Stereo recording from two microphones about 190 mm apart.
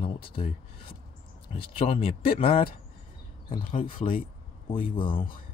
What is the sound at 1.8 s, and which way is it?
Speech, 30° left (ahead or behind).